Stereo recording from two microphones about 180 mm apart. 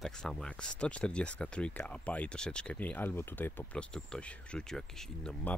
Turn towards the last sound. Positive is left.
turn(degrees=5)  # may be behind; listen again after turning